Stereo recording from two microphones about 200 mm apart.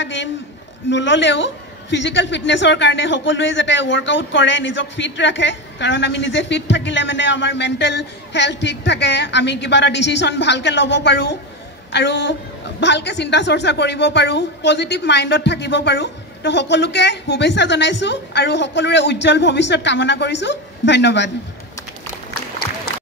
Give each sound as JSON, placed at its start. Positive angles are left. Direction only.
{"t": 0.0, "sound": "a woman's voice", "side_deg": 65}